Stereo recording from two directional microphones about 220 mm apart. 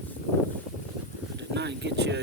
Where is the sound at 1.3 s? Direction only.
50° right (ahead or behind).